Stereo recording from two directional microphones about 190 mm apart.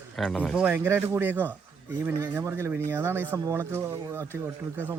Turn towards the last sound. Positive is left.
turn(degrees=-10)  # may be behind; listen again after turning